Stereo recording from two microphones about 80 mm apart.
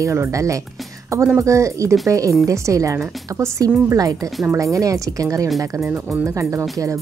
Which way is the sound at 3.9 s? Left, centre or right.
Right.